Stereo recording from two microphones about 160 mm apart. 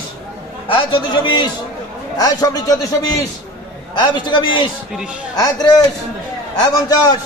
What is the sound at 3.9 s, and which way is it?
Speech, 30° left (ahead or behind).